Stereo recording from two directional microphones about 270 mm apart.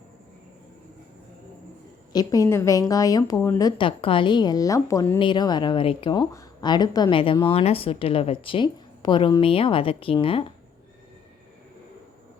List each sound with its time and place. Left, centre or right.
2.1 s a woman's voice: centre